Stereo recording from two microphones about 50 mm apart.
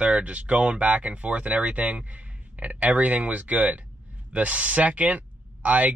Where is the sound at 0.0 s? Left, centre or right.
Right.